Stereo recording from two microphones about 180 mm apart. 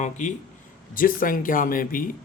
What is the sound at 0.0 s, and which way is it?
Speech, 40° left (ahead or behind).